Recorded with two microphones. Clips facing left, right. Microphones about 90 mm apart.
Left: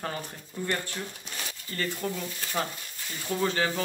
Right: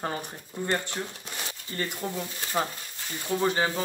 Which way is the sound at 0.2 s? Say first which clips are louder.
Right 1 dB; 20° right (ahead or behind).